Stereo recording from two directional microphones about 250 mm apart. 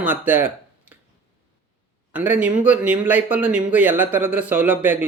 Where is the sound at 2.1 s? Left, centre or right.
Centre.